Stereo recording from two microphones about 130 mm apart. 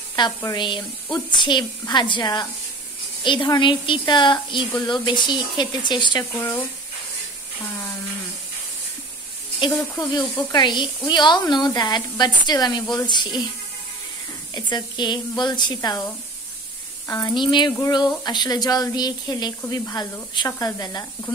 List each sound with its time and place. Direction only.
0.2 s speech: 35° left (ahead or behind)
6.3 s speech: 15° left (ahead or behind)
9.9 s speech: 35° left (ahead or behind)
14.5 s speech: 35° left (ahead or behind)
17.1 s speech: 35° left (ahead or behind)